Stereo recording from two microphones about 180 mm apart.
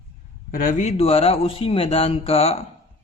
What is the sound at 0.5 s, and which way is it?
Speech, 50° left (ahead or behind).